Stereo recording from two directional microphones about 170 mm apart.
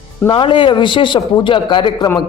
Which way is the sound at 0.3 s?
30° left (ahead or behind).